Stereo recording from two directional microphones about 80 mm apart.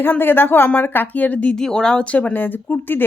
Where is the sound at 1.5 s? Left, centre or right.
Centre; by 3.0 s left.